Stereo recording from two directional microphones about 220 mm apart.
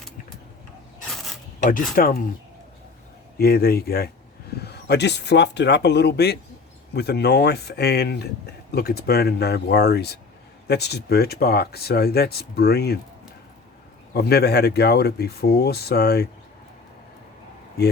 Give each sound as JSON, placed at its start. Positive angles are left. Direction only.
{"t": 1.1, "sound": "mechanisms", "side_deg": 0}
{"t": 1.6, "sound": "speech", "side_deg": 40}
{"t": 3.3, "sound": "speech", "side_deg": 45}
{"t": 14.1, "sound": "speech", "side_deg": 45}